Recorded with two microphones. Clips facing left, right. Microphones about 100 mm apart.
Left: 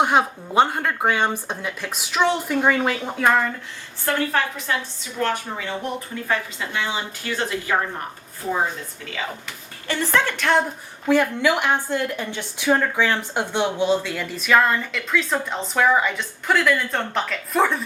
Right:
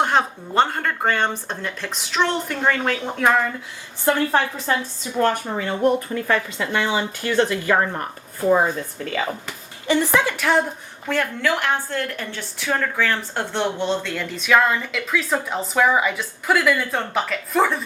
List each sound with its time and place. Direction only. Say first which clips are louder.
0.0 s a woman's voice: left 1 dB; 10° left (ahead or behind)
4.0 s a woman's voice: right 3 dB; 30° right (ahead or behind)
5.2 s a woman's voice: right 3 dB; 45° right (ahead or behind)
6.2 s a woman's voice: right 3 dB; 65° right (ahead or behind)
9.8 s a woman's voice: right 3 dB; 15° right (ahead or behind)
11.1 s a woman's voice: left 4 dB; 15° left (ahead or behind)